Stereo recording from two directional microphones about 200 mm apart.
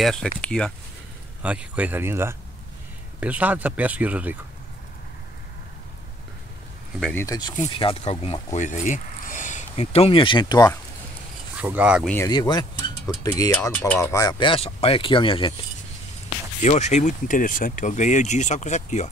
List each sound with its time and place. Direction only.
0.0 s speech: centre (ahead or behind)
1.4 s speech: 5° right (ahead or behind)
7.0 s speech: 5° left (ahead or behind)
7.2 s speech: 20° left (ahead or behind)
11.5 s speech: 5° right (ahead or behind)
12.3 s speech: 20° left (ahead or behind)
13.5 s speech: 5° left (ahead or behind); by 15.5 s 25° left (ahead or behind)
16.6 s speech: 35° left (ahead or behind)